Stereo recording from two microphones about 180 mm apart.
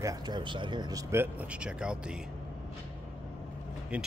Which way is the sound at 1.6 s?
5° right (ahead or behind).